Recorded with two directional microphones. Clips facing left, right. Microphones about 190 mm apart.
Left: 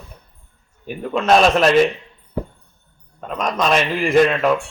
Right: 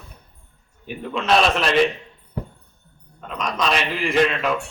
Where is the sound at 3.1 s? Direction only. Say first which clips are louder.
Left 4 dB; 45° left (ahead or behind).